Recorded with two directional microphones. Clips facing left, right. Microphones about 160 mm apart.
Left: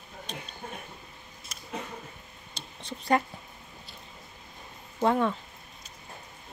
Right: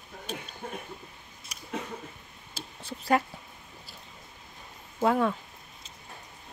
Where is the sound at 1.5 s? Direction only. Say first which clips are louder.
Right 2 dB; 10° right (ahead or behind).